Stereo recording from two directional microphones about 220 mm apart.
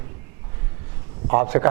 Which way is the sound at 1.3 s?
15° right (ahead or behind).